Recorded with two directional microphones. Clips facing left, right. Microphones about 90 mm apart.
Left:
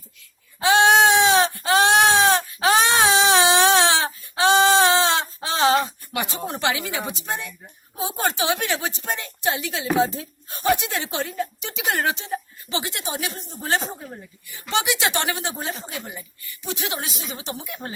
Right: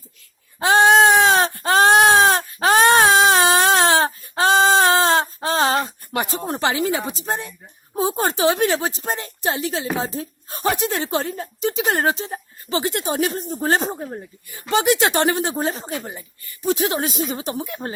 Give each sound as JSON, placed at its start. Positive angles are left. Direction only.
{"t": 0.6, "sound": "sheep", "side_deg": -40}
{"t": 7.9, "sound": "a woman's voice", "side_deg": -40}